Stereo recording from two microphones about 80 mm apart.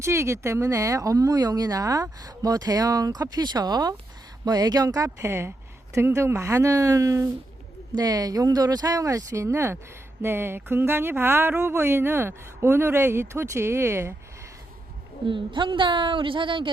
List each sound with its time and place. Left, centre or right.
0.0 s speech: right
7.9 s speech: right
15.3 s a woman's voice: right